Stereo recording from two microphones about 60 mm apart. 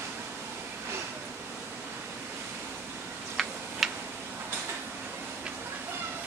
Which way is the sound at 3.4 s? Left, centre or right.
Centre.